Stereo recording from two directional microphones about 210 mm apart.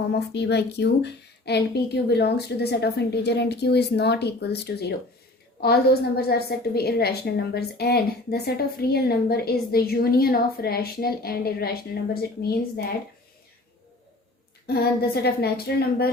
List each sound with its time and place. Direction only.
0.1 s a woman's voice: 55° left (ahead or behind)
14.7 s a woman's voice: 50° left (ahead or behind)